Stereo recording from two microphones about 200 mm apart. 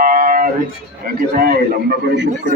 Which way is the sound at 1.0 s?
50° right (ahead or behind).